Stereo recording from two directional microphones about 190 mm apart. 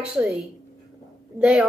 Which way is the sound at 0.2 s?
10° right (ahead or behind).